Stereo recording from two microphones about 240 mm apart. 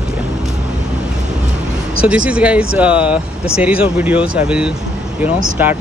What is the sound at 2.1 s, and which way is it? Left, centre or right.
Speech, centre.